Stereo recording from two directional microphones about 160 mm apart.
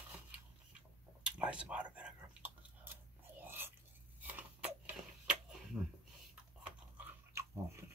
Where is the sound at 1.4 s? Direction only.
5° right (ahead or behind).